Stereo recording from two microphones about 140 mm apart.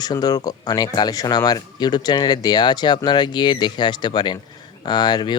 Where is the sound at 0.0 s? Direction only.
30° left (ahead or behind).